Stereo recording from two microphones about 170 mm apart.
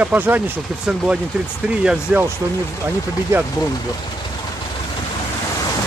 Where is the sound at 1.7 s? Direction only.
5° right (ahead or behind).